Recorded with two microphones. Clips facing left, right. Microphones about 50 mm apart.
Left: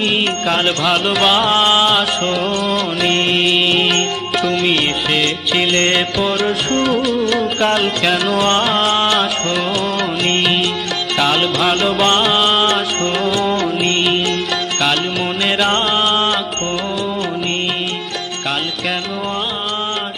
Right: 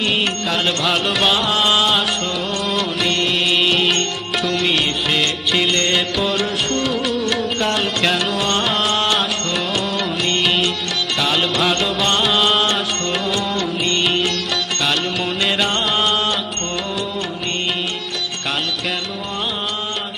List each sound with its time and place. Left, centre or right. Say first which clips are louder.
0.0 s music: left 3 dB; centre
3.1 s music: left 5 dB; left
3.4 s music: left 2 dB; centre